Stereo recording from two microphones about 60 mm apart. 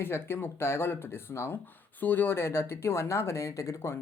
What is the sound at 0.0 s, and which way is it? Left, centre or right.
Speech, left.